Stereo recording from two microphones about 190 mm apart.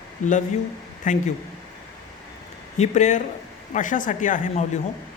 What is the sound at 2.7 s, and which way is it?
Speech, 35° left (ahead or behind).